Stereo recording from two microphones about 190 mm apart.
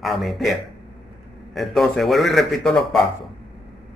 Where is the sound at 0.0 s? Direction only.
Centre (ahead or behind).